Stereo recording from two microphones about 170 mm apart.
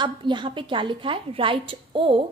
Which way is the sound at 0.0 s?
25° right (ahead or behind).